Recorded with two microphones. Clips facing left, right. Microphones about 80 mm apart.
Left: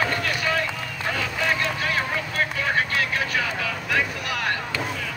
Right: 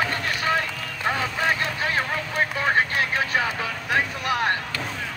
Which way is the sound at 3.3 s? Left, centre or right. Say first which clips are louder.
Right 1 dB; right.